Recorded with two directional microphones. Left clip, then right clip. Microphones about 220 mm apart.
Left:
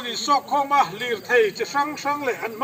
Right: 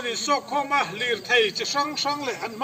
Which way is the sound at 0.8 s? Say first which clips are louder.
Even; 40° right (ahead or behind).